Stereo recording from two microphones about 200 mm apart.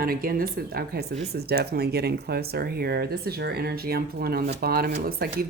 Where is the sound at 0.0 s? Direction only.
45° right (ahead or behind).